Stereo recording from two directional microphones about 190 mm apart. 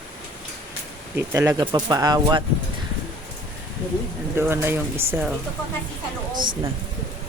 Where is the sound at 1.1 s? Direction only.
15° right (ahead or behind).